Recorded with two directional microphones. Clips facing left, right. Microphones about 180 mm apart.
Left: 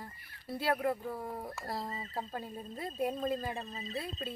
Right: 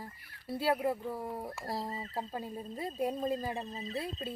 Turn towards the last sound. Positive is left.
turn(degrees=-15)  # may be behind; listen again after turning